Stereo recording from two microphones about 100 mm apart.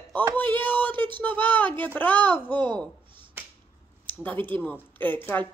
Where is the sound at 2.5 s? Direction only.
50° right (ahead or behind).